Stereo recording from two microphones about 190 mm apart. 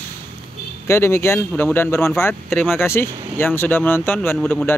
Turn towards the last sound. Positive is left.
turn(degrees=5)  # may be behind; listen again after turning